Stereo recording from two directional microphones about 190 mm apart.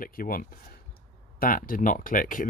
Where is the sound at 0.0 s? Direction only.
50° left (ahead or behind).